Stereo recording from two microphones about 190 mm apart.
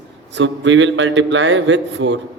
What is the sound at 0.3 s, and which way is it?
A man's voice, 80° right.